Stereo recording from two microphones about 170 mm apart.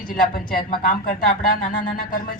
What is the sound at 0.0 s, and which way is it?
Speech, 55° left (ahead or behind).